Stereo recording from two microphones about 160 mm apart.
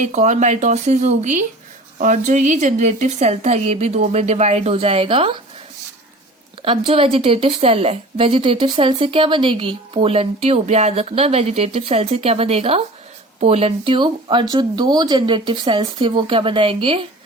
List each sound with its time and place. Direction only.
0.0 s speech: 50° right (ahead or behind)
6.6 s a woman's voice: 35° right (ahead or behind)